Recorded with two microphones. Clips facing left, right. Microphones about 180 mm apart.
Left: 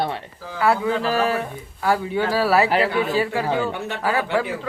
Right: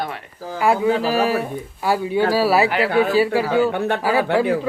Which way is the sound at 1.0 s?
10° right (ahead or behind).